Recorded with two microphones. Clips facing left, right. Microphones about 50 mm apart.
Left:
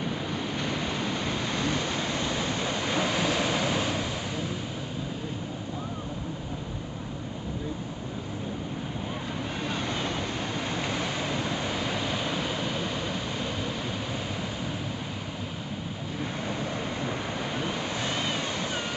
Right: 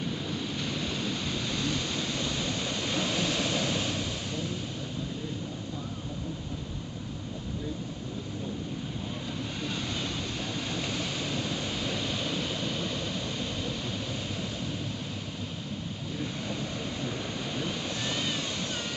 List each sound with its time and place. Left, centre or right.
0.0 s waves: left
9.7 s vehicle: left
10.7 s a sound: centre
17.6 s vehicle: centre